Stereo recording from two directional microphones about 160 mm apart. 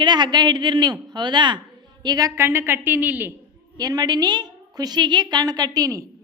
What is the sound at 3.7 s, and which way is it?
A woman's voice, 25° right (ahead or behind).